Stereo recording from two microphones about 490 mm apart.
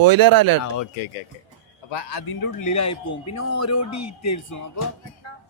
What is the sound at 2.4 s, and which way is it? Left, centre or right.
Speech, left.